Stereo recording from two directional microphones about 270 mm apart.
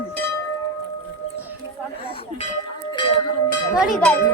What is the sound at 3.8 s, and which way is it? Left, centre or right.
Speech, centre.